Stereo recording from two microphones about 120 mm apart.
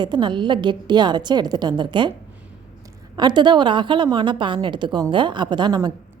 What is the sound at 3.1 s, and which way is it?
A woman's voice, 40° right (ahead or behind).